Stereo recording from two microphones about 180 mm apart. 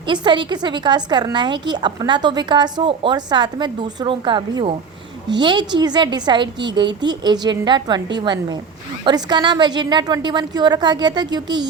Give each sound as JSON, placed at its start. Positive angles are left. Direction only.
{"t": 0.1, "sound": "a woman's voice", "side_deg": -25}